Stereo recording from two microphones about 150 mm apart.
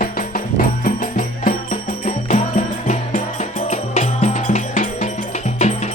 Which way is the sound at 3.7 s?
50° left (ahead or behind).